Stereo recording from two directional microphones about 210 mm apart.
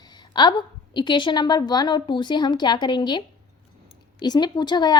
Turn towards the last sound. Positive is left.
turn(degrees=20)  # may be behind; listen again after turning